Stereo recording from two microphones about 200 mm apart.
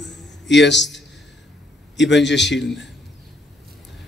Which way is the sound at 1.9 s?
65° left (ahead or behind).